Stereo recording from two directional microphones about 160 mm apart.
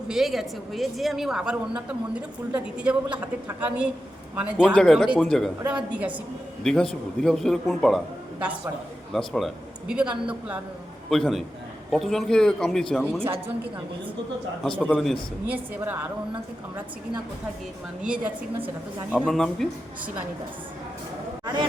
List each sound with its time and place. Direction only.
0.1 s a woman's voice: centre (ahead or behind)
4.7 s a woman's voice: 5° left (ahead or behind)
5.6 s a woman's voice: 10° right (ahead or behind)
6.6 s a woman's voice: 5° left (ahead or behind)
13.2 s a woman's voice: 15° right (ahead or behind)
14.6 s a woman's voice: 5° left (ahead or behind)
15.4 s a woman's voice: 10° right (ahead or behind)
19.1 s a woman's voice: centre (ahead or behind)
21.4 s speech: 30° right (ahead or behind)